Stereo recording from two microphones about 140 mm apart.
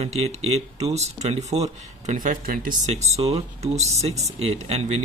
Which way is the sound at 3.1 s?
50° right (ahead or behind).